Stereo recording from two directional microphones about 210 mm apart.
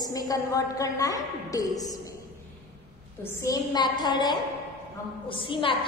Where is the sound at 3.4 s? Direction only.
20° left (ahead or behind).